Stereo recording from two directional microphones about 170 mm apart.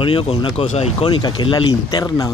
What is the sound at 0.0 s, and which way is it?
Speech, 35° left (ahead or behind).